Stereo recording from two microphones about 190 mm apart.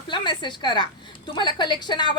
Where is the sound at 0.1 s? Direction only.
25° left (ahead or behind).